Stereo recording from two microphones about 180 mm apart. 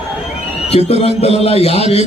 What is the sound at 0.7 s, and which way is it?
A man's voice, 35° left (ahead or behind).